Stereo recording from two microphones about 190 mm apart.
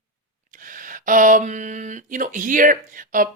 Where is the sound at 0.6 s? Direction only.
45° right (ahead or behind).